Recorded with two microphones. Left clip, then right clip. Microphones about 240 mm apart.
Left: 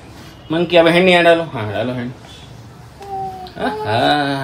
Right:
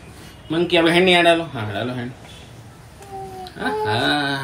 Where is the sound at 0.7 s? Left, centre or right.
Centre.